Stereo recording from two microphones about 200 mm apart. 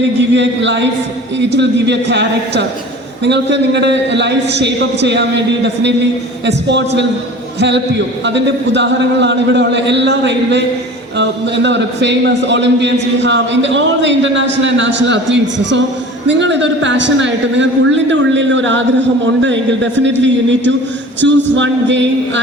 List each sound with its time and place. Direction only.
0.3 s a man's voice: 65° right (ahead or behind)